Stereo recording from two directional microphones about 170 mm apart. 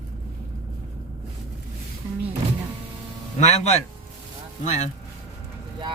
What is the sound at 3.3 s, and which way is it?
Speech, 40° left (ahead or behind).